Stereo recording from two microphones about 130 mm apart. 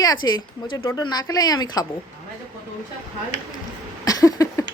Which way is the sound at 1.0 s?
30° left (ahead or behind).